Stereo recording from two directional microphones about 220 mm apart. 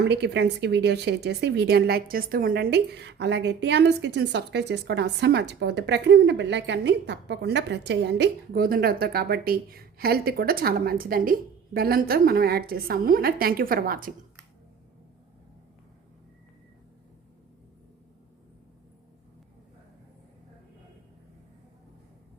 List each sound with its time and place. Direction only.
0.0 s a woman's voice: 50° right (ahead or behind)